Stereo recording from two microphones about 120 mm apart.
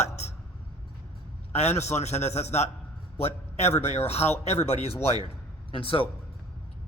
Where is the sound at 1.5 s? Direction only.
60° left (ahead or behind).